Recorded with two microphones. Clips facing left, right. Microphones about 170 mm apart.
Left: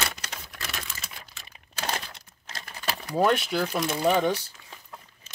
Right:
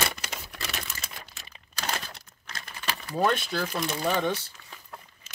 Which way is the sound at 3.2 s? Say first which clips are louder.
Left 3 dB; 15° left (ahead or behind).